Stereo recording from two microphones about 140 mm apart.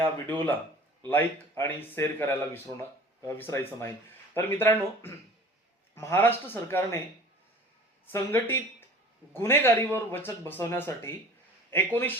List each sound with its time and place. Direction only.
0.0 s speech: 15° left (ahead or behind)
8.1 s speech: 20° left (ahead or behind)